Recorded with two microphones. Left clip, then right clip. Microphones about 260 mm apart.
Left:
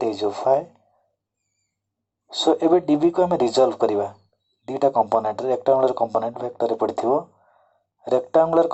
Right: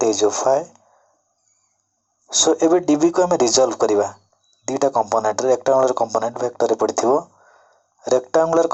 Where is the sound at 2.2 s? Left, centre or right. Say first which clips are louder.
Right 3 dB; right.